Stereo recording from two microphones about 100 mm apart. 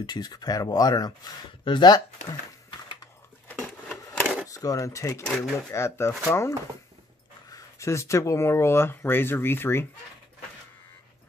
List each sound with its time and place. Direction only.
0.0 s speech: 45° left (ahead or behind)
3.4 s a sound: 20° left (ahead or behind)
4.5 s speech: 35° left (ahead or behind)